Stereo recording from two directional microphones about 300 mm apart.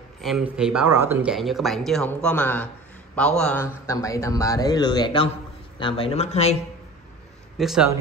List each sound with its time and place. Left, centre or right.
0.2 s a man's voice: centre; by 6.5 s left
7.5 s speech: centre